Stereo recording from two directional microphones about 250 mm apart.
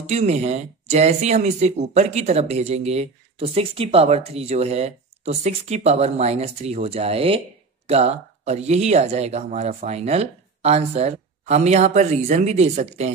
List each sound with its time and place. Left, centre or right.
0.0 s speech: right